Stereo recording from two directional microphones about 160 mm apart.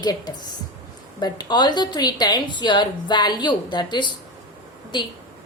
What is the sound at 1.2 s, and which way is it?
A woman's voice, 25° left (ahead or behind).